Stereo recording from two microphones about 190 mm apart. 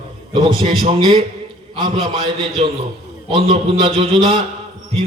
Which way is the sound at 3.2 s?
30° right (ahead or behind).